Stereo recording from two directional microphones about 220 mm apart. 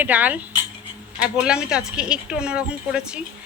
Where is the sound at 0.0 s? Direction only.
5° right (ahead or behind).